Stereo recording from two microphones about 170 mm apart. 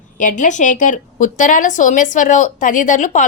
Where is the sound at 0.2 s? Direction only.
50° left (ahead or behind).